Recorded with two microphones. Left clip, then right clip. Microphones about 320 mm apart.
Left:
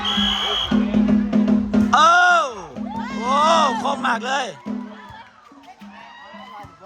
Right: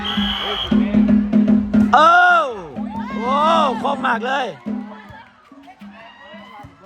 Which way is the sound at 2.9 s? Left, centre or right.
Left.